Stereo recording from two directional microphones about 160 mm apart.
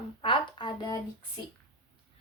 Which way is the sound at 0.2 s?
30° left (ahead or behind).